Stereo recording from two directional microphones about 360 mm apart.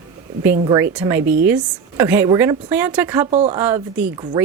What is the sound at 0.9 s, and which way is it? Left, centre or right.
A woman's voice, centre.